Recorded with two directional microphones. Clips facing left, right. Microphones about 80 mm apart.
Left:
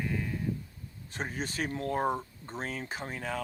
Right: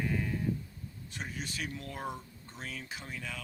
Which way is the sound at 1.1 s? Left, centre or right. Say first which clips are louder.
Left 6 dB; left.